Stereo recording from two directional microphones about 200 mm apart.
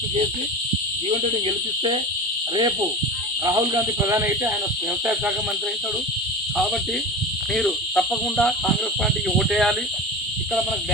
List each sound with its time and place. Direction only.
1.1 s speech: 30° right (ahead or behind)
3.4 s speech: 15° right (ahead or behind)
7.5 s speech: 5° left (ahead or behind)